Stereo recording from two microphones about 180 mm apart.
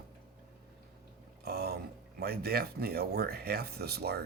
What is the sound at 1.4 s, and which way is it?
Speech, 60° right (ahead or behind).